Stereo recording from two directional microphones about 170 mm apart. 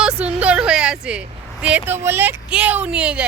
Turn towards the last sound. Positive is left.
turn(degrees=-5)  # may be behind; listen again after turning